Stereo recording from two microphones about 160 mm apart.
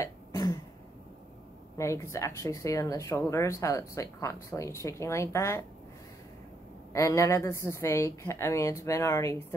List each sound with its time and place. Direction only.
0.0 s throat clearing: 20° left (ahead or behind)
1.8 s speech: 20° left (ahead or behind)
6.9 s speech: 20° left (ahead or behind)